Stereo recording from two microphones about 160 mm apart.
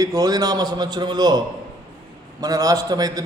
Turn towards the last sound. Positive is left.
turn(degrees=-25)  # may be behind; listen again after turning